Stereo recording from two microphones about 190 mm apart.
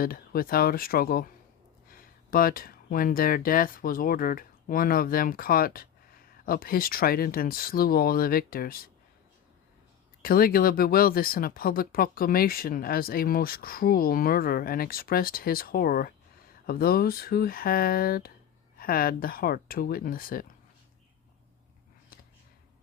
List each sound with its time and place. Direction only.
0.0 s speech: 50° left (ahead or behind)
10.2 s speech: 50° left (ahead or behind)